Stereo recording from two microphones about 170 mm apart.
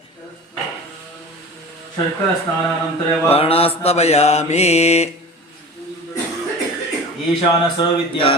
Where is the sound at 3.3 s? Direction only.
35° left (ahead or behind).